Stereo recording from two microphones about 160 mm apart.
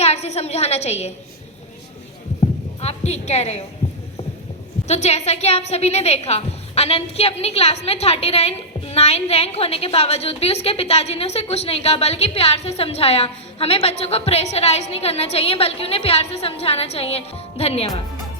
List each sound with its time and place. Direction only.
0.0 s a woman's voice: 40° left (ahead or behind)
2.4 s speech: 40° left (ahead or behind)
4.9 s a woman's voice: 45° left (ahead or behind)